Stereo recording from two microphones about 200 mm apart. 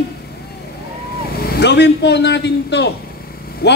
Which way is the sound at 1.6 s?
60° left (ahead or behind).